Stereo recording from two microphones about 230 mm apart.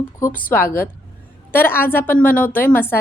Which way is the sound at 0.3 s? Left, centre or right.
Left.